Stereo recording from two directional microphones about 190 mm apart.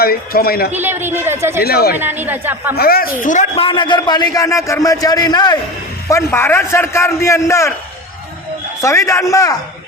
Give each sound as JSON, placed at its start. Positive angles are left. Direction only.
{"t": 0.0, "sound": "a man's voice", "side_deg": 50}
{"t": 0.7, "sound": "a man's voice", "side_deg": -10}
{"t": 1.6, "sound": "speech", "side_deg": 55}
{"t": 2.0, "sound": "a man's voice", "side_deg": -10}
{"t": 2.7, "sound": "a man's voice", "side_deg": 50}
{"t": 3.5, "sound": "a man's voice", "side_deg": 25}
{"t": 8.8, "sound": "a man's voice", "side_deg": 15}